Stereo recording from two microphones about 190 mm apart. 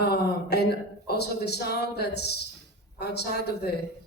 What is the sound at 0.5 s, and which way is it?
Speech, 60° left (ahead or behind).